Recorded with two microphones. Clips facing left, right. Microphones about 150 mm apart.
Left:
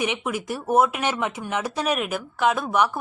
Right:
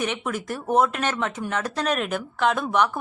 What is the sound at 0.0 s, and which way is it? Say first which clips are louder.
A woman's voice: left 1 dB; 10° left (ahead or behind).